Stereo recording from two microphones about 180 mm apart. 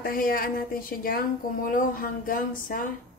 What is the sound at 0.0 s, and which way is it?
A woman's voice, 50° left (ahead or behind).